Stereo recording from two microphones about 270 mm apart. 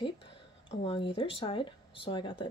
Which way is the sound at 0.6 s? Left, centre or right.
Centre.